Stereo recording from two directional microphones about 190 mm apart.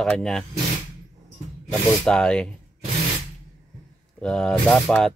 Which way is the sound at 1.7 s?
5° left (ahead or behind).